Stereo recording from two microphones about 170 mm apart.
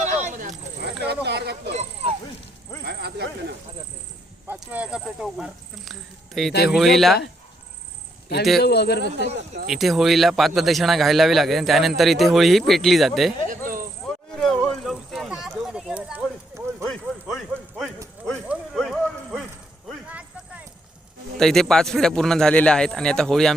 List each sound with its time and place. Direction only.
0.0 s snake: 40° right (ahead or behind)
0.8 s speech: 75° right (ahead or behind)
1.7 s snake: 40° right (ahead or behind)
2.8 s snake: 70° right (ahead or behind)
4.4 s speech: 10° right (ahead or behind)
8.6 s speech: 75° left (ahead or behind)
9.6 s speech: centre (ahead or behind)
14.3 s a sound: 5° left (ahead or behind)
16.8 s clip-clop: 5° left (ahead or behind)
18.4 s a sound: centre (ahead or behind)
21.3 s speech: 5° left (ahead or behind)